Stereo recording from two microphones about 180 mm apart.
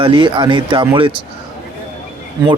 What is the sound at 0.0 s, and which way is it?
Speech, 30° right (ahead or behind).